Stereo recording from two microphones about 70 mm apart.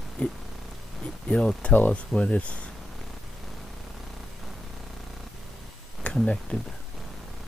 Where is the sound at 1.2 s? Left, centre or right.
Centre.